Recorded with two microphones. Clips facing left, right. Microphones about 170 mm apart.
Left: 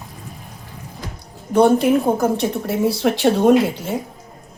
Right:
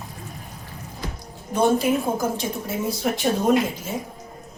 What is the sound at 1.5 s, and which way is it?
Speech, 65° left (ahead or behind).